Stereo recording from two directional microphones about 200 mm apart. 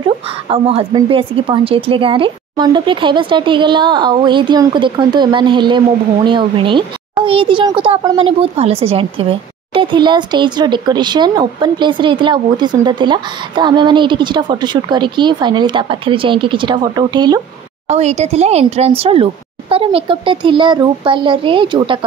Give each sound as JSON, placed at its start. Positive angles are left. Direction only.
{"t": 0.0, "sound": "speech", "side_deg": -30}
{"t": 17.8, "sound": "speech", "side_deg": -35}